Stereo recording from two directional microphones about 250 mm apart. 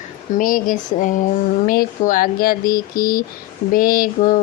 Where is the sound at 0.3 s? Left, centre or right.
Left.